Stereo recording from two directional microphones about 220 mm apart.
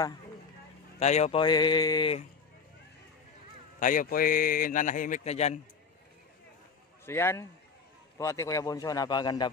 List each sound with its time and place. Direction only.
0.9 s speech: 30° left (ahead or behind)
3.8 s a man's voice: 40° left (ahead or behind)
7.1 s a man's voice: 10° left (ahead or behind)